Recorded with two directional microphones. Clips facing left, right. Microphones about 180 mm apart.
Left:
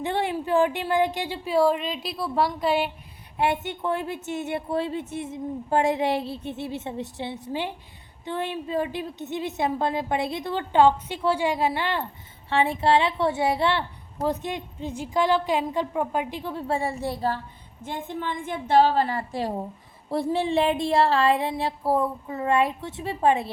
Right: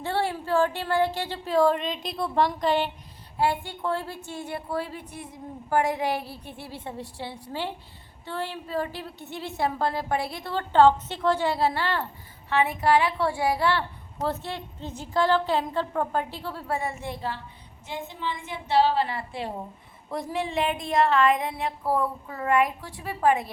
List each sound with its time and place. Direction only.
0.0 s a woman's voice: 20° left (ahead or behind)
3.3 s a woman's voice: 25° left (ahead or behind)
12.5 s a woman's voice: 30° left (ahead or behind)
17.8 s a woman's voice: 50° left (ahead or behind); by 23.5 s 25° left (ahead or behind)